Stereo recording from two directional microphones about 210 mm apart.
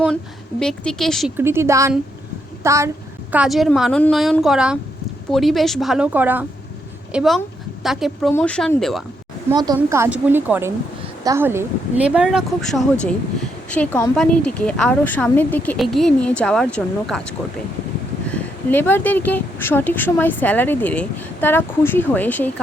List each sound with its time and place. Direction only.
0.6 s speech: 5° left (ahead or behind)
1.4 s a woman's voice: 10° right (ahead or behind)
3.3 s speech: centre (ahead or behind)
9.5 s a woman's voice: 20° right (ahead or behind); by 17.2 s 5° left (ahead or behind)
18.3 s speech: 10° left (ahead or behind)